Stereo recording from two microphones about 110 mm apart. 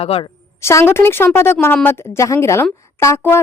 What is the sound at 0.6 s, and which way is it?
A woman's voice, 25° left (ahead or behind).